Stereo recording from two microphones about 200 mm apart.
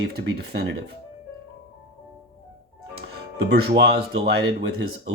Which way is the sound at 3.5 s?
50° right (ahead or behind).